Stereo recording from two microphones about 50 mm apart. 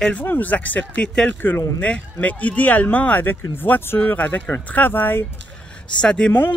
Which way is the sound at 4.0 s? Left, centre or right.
Left.